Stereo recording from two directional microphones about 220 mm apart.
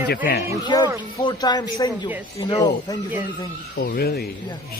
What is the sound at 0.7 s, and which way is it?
A man's voice, 20° left (ahead or behind).